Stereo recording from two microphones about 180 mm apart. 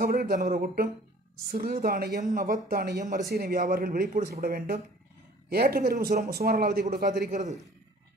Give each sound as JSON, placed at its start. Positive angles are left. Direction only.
{"t": 0.0, "sound": "speech", "side_deg": -55}